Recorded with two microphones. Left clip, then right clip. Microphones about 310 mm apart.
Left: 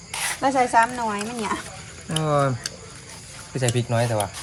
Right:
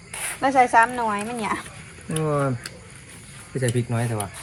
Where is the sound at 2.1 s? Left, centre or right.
Left.